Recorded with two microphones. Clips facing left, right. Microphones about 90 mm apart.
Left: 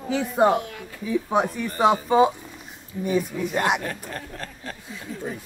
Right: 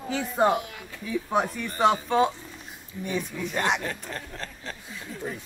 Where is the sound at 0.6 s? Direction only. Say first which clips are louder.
Left 4 dB; 10° right (ahead or behind).